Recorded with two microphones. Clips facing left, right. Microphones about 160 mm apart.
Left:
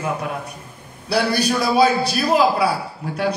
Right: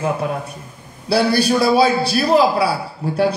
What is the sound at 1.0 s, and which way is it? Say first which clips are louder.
A man's voice: right 4 dB; 30° right (ahead or behind).